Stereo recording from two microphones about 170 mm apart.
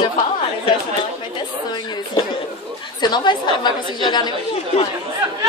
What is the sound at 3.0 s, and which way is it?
A woman's voice, 25° left (ahead or behind).